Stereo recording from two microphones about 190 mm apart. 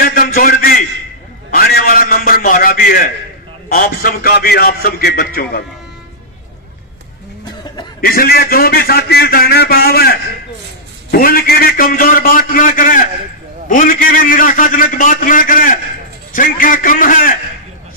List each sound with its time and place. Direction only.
0.0 s a sound: 50° left (ahead or behind)
3.6 s a man's voice: 50° left (ahead or behind)
8.0 s a man's voice: 50° left (ahead or behind)